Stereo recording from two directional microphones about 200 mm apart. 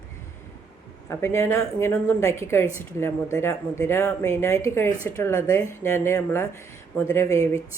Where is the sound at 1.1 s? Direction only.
15° left (ahead or behind).